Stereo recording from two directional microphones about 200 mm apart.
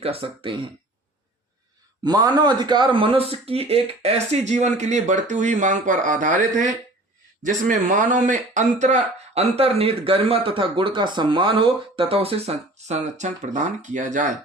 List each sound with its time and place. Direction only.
0.0 s speech: 30° right (ahead or behind)
2.4 s speech: 20° right (ahead or behind); by 14.3 s 40° right (ahead or behind)